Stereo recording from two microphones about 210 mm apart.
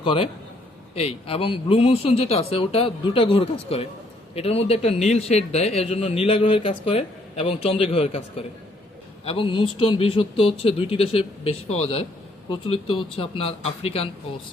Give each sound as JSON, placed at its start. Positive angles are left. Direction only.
{"t": 0.0, "sound": "a man's voice", "side_deg": 25}
{"t": 9.2, "sound": "a man's voice", "side_deg": 25}